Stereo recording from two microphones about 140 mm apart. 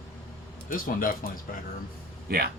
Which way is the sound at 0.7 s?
80° left.